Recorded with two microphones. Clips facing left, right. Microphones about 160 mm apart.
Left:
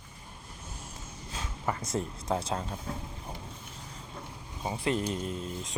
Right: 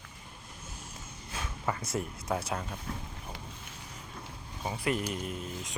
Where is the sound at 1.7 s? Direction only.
20° left (ahead or behind).